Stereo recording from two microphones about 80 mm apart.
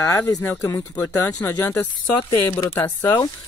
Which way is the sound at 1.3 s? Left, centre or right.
Left.